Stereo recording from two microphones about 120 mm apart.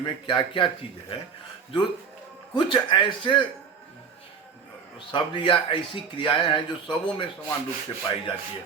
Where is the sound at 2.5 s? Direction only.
40° left (ahead or behind).